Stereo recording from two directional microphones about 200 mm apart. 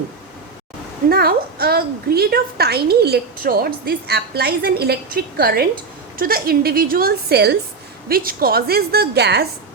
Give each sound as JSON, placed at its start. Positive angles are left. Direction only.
{"t": 1.1, "sound": "a woman's voice", "side_deg": -50}